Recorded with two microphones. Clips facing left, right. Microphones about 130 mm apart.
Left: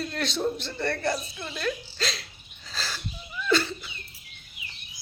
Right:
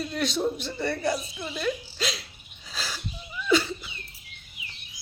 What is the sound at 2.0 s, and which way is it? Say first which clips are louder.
Hiccup: right 1 dB; 10° right (ahead or behind).